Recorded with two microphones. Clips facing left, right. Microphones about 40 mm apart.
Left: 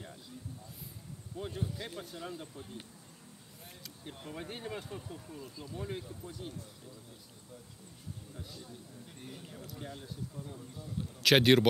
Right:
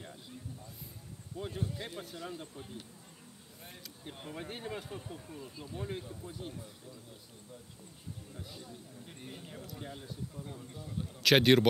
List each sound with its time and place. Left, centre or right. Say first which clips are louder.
1.4 s speech: even; centre
4.0 s speech: even; centre
8.3 s a man's voice: even; centre
10.4 s speech: right 1 dB; right
11.1 s speech: even; centre